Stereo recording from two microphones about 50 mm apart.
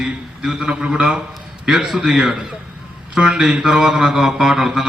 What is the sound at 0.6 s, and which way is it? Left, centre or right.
Mantra, centre.